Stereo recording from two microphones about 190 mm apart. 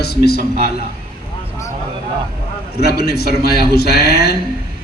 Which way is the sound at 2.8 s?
55° left (ahead or behind).